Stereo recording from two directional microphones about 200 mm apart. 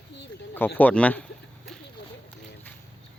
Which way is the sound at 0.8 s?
5° left (ahead or behind).